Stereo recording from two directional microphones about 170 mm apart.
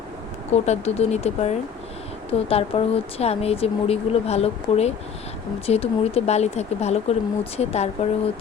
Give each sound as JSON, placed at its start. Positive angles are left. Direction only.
{"t": 0.5, "sound": "speech", "side_deg": 40}